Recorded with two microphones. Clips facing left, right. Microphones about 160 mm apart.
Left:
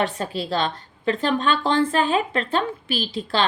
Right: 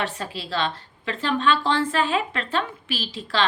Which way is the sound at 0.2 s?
40° left (ahead or behind).